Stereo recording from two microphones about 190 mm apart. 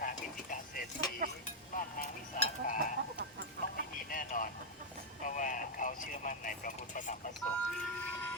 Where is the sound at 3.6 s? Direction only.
60° right (ahead or behind).